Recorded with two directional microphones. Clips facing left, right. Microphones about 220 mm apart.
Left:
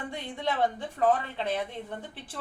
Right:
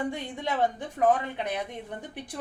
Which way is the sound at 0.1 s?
15° right (ahead or behind).